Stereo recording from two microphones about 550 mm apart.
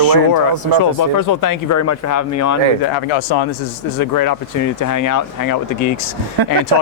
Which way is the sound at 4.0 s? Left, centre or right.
Left.